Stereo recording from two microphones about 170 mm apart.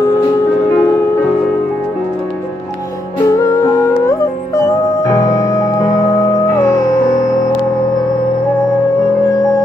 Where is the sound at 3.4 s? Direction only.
20° left (ahead or behind).